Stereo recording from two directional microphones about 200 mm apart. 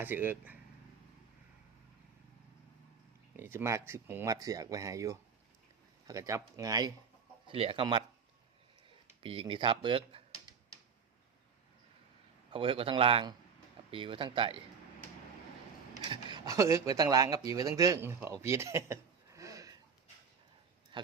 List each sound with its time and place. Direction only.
0.0 s speech: 10° right (ahead or behind)
3.3 s speech: 10° right (ahead or behind)
9.2 s speech: 25° right (ahead or behind)
12.5 s speech: 25° right (ahead or behind)
16.0 s speech: 20° right (ahead or behind)
20.9 s speech: 25° right (ahead or behind)